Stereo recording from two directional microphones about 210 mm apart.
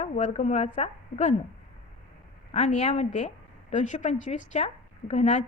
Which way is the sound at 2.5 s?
35° left (ahead or behind).